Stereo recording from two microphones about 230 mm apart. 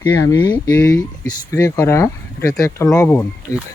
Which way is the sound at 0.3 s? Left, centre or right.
Centre.